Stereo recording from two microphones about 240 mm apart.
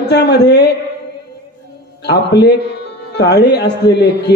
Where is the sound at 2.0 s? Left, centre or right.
Left.